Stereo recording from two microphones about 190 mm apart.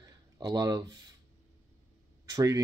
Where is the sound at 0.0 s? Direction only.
20° right (ahead or behind).